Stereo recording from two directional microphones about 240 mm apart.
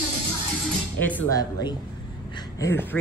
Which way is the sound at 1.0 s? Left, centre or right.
Centre.